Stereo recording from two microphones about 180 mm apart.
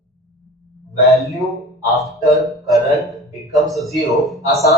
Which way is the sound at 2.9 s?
Centre (ahead or behind).